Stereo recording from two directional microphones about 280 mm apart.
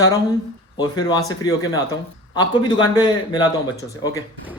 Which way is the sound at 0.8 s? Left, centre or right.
Centre.